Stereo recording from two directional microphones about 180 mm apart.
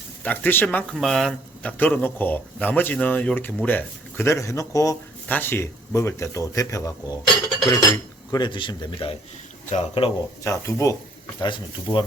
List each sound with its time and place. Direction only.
0.2 s speech: 10° left (ahead or behind); by 10.1 s 35° left (ahead or behind)
10.4 s speech: 15° left (ahead or behind)